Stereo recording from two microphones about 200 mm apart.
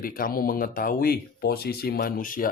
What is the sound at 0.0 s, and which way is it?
Speech, 45° left (ahead or behind).